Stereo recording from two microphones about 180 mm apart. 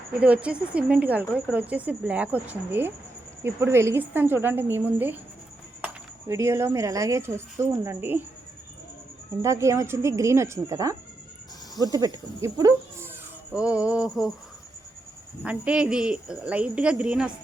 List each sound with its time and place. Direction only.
0.2 s speech: 5° right (ahead or behind)
9.4 s speech: 15° right (ahead or behind)
13.5 s speech: 5° right (ahead or behind)
15.4 s speech: 5° right (ahead or behind)